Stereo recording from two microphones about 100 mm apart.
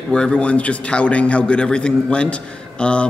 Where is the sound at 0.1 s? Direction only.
10° left (ahead or behind).